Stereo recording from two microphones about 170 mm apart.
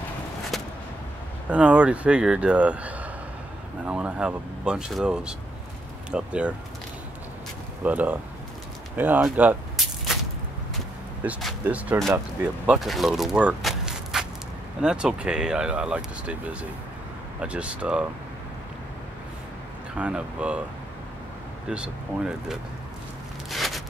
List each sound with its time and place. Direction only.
0.5 s a sound: centre (ahead or behind)
1.5 s speech: 5° right (ahead or behind)
7.8 s speech: 10° right (ahead or behind)
11.2 s speech: 10° right (ahead or behind)
20.0 s speech: 5° right (ahead or behind)
21.6 s speech: 5° right (ahead or behind)
23.5 s a sound: centre (ahead or behind)